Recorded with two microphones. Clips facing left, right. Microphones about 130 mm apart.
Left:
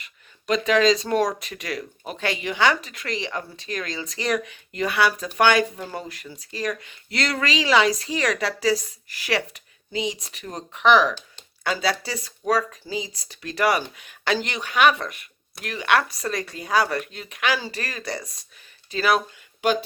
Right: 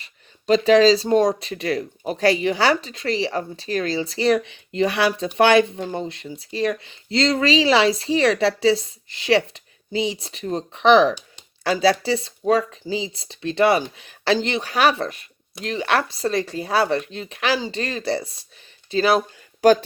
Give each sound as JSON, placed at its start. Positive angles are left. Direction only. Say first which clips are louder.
{"t": 0.0, "sound": "speech", "louder": "right 5 dB", "side_deg": -30}